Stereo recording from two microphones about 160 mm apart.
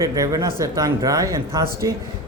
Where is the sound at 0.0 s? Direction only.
20° right (ahead or behind).